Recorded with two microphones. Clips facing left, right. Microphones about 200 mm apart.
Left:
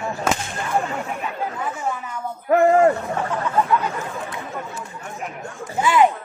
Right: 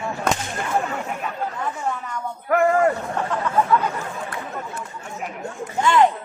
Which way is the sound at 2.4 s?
25° left (ahead or behind).